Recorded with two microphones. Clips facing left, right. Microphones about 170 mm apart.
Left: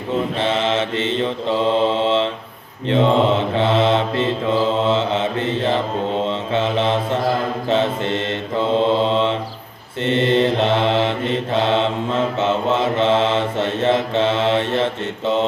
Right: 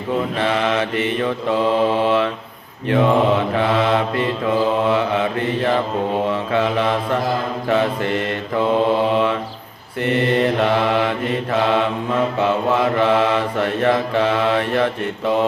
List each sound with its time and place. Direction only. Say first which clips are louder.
0.3 s mantra: even; 25° left (ahead or behind)